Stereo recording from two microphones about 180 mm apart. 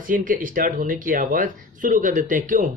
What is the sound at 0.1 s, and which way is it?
Speech, 50° right (ahead or behind).